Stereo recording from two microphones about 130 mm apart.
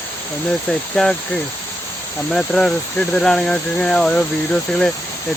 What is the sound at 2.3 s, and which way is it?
Speech, 5° left (ahead or behind).